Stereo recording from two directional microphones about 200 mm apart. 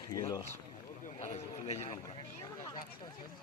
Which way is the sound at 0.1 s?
15° left (ahead or behind).